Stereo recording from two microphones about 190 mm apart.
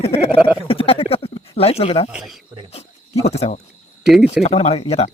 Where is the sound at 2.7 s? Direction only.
35° left (ahead or behind).